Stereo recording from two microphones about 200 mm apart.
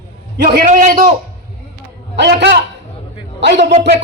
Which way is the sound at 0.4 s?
45° right (ahead or behind).